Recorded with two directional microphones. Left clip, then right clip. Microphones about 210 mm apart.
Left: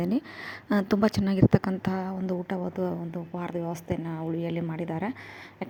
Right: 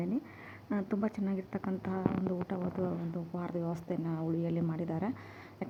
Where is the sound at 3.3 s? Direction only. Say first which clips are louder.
Left 6 dB; 30° left (ahead or behind).